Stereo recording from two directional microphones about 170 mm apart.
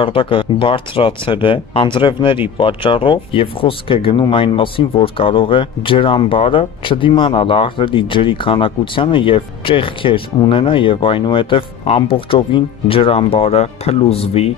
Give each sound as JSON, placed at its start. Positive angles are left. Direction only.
{"t": 0.0, "sound": "speech", "side_deg": 30}